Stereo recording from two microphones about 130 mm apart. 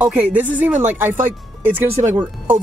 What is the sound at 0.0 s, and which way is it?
Speech, 10° right (ahead or behind).